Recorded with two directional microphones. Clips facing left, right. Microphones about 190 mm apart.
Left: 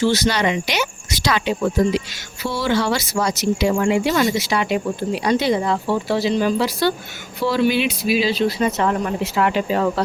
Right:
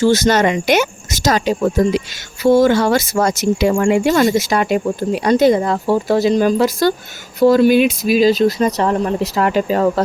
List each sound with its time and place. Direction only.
0.0 s speech: 45° right (ahead or behind)